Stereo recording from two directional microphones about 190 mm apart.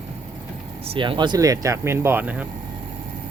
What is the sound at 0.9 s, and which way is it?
Speech, 25° right (ahead or behind).